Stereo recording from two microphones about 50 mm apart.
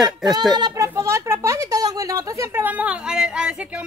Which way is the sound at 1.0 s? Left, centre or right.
Right.